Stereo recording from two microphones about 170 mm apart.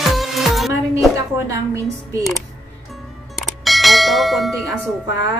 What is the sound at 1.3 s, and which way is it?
Speech, 15° right (ahead or behind).